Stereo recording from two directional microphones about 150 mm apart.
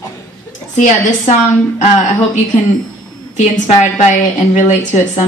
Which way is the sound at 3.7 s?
55° left (ahead or behind).